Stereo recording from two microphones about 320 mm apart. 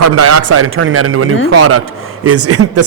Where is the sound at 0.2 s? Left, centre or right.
Right.